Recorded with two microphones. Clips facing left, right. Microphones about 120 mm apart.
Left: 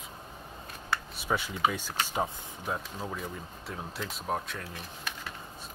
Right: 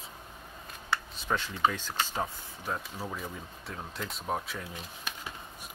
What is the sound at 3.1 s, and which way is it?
Speech, centre (ahead or behind).